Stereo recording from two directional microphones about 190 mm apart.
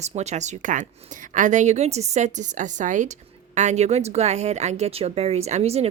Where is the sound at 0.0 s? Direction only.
35° right (ahead or behind).